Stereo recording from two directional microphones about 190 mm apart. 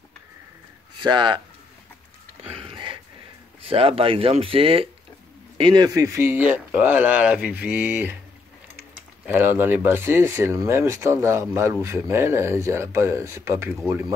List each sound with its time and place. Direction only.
1.0 s speech: 25° right (ahead or behind)
2.5 s a sound: 25° right (ahead or behind)
3.6 s speech: 30° right (ahead or behind); by 13.7 s 15° right (ahead or behind)